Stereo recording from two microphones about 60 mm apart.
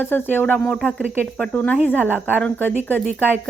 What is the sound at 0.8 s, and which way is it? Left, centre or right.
Speech, centre.